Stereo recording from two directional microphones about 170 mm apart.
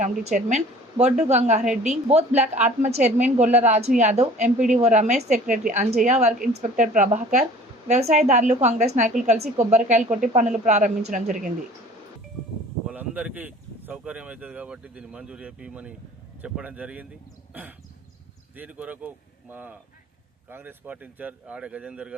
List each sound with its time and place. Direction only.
0.0 s a woman's voice: 45° right (ahead or behind)
12.9 s speech: 10° right (ahead or behind)
17.5 s wild animals: 10° right (ahead or behind)
18.5 s speech: 10° right (ahead or behind)